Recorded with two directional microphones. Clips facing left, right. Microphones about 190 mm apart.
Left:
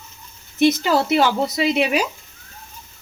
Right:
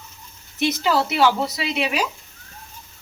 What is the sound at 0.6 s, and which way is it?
Speech, 45° left (ahead or behind).